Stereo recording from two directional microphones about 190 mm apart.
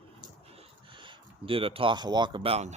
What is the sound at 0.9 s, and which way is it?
Speech, 25° right (ahead or behind).